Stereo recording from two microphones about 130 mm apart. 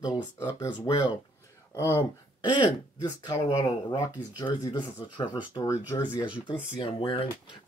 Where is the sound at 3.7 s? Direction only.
30° left (ahead or behind).